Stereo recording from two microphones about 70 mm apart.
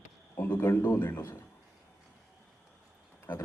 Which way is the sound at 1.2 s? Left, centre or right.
Left.